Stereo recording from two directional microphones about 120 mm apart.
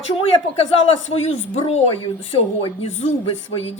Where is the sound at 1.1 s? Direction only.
60° left (ahead or behind).